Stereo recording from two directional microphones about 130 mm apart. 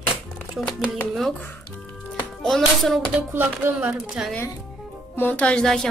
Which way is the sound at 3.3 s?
15° right (ahead or behind).